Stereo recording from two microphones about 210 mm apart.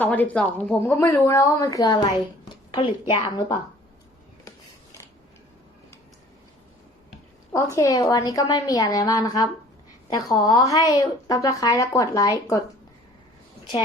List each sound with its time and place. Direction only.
0.0 s a woman's voice: 10° left (ahead or behind)
2.4 s a sound: 25° left (ahead or behind)
3.1 s speech: 20° left (ahead or behind)
7.5 s a woman's voice: 15° left (ahead or behind)